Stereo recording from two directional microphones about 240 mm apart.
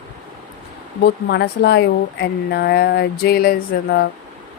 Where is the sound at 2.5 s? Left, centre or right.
Left.